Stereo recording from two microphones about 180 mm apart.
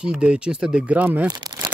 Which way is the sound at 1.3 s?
20° right (ahead or behind).